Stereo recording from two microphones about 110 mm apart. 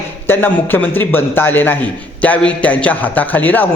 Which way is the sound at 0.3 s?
20° left (ahead or behind).